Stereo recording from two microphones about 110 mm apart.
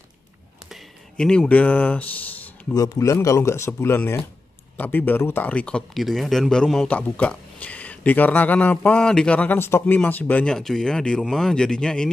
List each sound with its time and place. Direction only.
1.1 s speech: 5° left (ahead or behind)
2.7 s speech: 35° left (ahead or behind); by 12.1 s 5° left (ahead or behind)